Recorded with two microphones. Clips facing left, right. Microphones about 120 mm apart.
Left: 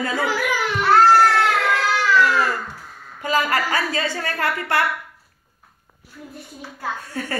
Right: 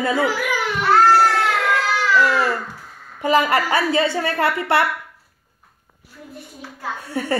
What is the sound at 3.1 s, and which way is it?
A woman's voice, 20° right (ahead or behind).